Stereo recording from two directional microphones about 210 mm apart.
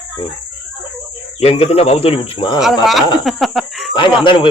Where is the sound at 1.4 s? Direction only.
30° left (ahead or behind).